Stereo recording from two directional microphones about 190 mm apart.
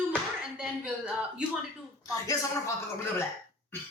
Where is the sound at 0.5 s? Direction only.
5° right (ahead or behind).